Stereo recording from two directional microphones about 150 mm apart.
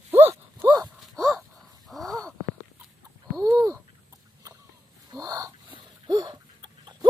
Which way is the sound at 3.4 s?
25° right (ahead or behind).